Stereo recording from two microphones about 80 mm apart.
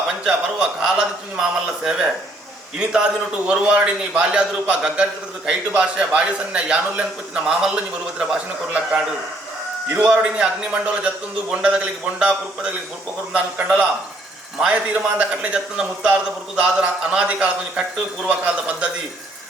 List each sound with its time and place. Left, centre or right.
0.3 s a man's voice: centre
15.2 s a man's voice: centre